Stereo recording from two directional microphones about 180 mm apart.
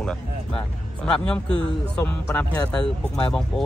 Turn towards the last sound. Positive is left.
turn(degrees=5)  # may be behind; listen again after turning